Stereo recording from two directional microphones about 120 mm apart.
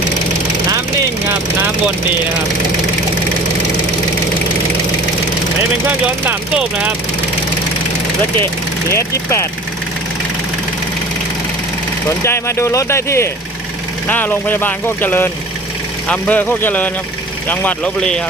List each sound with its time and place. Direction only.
6.2 s speech: 10° right (ahead or behind)
8.9 s speech: 25° left (ahead or behind)
12.2 s speech: 20° left (ahead or behind)